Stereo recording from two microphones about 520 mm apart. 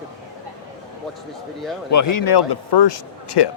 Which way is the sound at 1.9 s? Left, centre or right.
Left.